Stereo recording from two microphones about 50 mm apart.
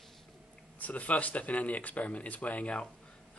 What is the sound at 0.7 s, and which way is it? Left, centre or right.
Speech, left.